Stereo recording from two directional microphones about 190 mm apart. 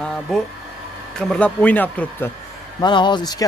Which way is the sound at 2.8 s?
25° left (ahead or behind).